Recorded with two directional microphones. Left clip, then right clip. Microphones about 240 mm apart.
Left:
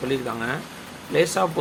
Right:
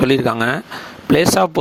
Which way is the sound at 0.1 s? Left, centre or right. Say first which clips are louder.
Right 10 dB; right.